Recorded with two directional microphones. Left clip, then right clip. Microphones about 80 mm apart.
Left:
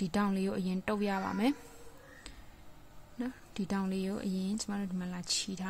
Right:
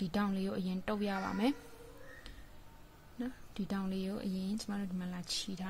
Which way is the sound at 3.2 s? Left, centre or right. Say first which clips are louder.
Left 3 dB; left.